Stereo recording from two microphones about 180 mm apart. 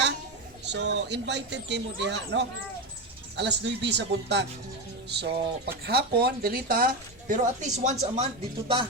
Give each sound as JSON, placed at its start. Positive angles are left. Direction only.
{"t": 0.6, "sound": "speech", "side_deg": -75}
{"t": 8.6, "sound": "speech", "side_deg": -30}